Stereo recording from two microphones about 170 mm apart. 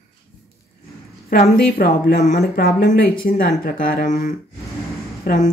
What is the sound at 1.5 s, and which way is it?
A woman's voice, 60° left (ahead or behind).